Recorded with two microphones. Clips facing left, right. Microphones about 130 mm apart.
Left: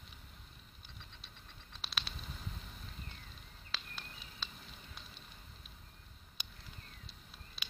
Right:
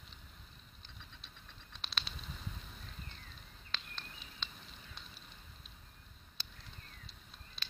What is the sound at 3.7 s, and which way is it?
Fire, 5° left (ahead or behind).